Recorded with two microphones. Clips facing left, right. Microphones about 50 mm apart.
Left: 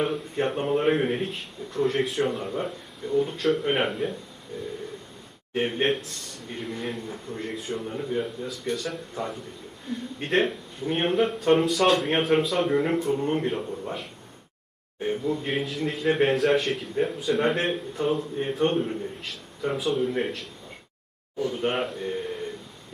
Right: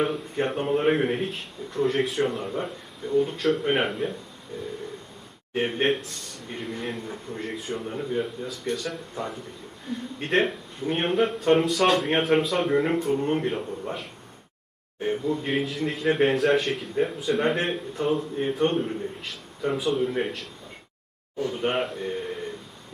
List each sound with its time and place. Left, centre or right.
0.0 s speech: centre
5.5 s speech: centre
15.2 s speech: centre